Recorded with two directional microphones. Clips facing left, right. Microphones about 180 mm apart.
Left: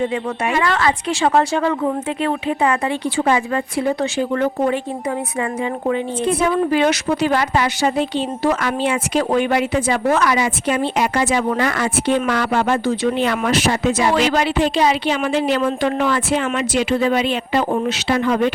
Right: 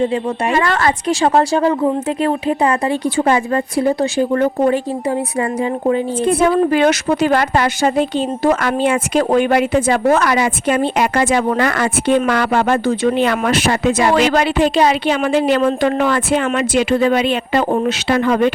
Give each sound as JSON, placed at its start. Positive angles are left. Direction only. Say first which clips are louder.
{"t": 0.1, "sound": "a woman's voice", "louder": "right 3 dB", "side_deg": -40}
{"t": 5.9, "sound": "speech", "louder": "right 3 dB", "side_deg": -50}